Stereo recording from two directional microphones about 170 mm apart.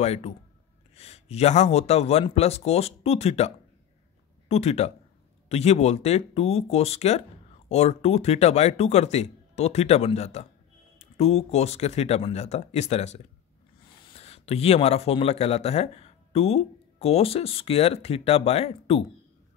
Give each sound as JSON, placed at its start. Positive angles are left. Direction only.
{"t": 0.0, "sound": "speech", "side_deg": 40}